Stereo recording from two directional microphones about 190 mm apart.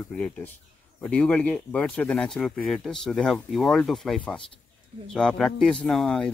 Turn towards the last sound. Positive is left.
turn(degrees=5)  # may be behind; listen again after turning